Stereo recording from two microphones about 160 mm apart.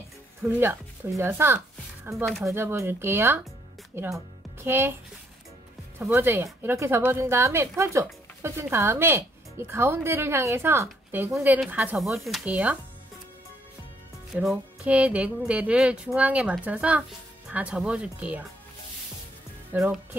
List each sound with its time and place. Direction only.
0.4 s a woman's voice: 10° right (ahead or behind)
5.9 s a woman's voice: 10° right (ahead or behind)
14.3 s a woman's voice: centre (ahead or behind)
19.7 s speech: 5° right (ahead or behind)